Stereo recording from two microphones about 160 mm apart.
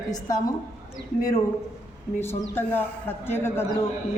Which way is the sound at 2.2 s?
15° left (ahead or behind).